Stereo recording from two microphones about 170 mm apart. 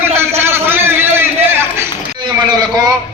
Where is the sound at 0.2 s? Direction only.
15° right (ahead or behind).